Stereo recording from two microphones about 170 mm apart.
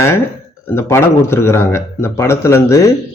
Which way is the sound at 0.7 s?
15° left (ahead or behind).